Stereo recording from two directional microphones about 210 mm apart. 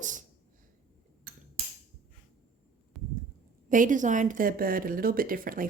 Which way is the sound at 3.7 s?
40° right (ahead or behind).